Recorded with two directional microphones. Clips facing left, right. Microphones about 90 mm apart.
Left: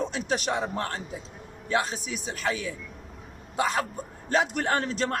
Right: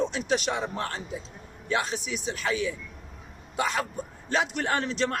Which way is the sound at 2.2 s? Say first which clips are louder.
Right 2 dB; 45° left (ahead or behind).